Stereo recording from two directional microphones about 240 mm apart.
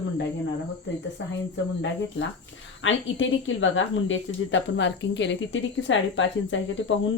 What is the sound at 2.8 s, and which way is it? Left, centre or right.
Speech, left.